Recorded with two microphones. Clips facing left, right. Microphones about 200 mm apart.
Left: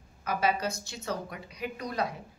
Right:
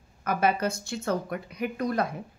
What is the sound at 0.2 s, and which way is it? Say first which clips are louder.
A woman's voice: right 3 dB; 55° right (ahead or behind).